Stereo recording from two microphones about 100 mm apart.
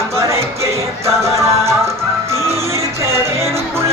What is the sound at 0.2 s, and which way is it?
Music, 30° right (ahead or behind).